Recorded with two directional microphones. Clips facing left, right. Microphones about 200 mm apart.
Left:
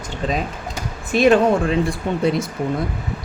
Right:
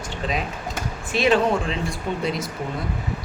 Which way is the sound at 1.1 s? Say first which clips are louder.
Left 5 dB; 50° left (ahead or behind).